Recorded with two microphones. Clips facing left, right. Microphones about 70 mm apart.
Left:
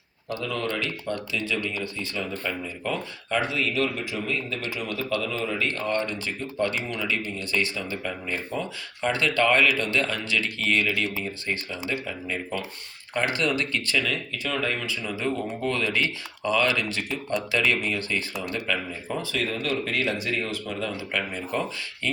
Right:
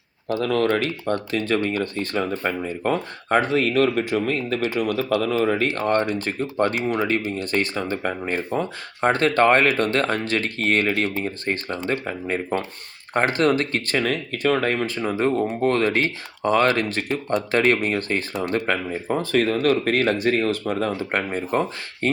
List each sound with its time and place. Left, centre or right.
0.4 s speech: right
0.7 s speech: right
1.5 s speech: right